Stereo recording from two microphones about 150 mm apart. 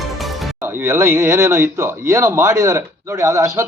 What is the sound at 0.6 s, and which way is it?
Speech, 15° right (ahead or behind).